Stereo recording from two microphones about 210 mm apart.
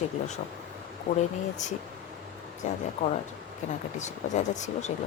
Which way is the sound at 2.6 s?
35° left (ahead or behind).